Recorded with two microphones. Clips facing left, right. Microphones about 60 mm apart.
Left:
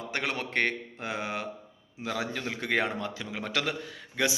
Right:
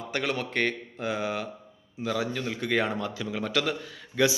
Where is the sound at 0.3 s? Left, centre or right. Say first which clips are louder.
Right 1 dB; left.